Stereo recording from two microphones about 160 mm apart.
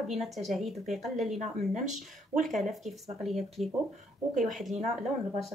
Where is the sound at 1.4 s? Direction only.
50° right (ahead or behind).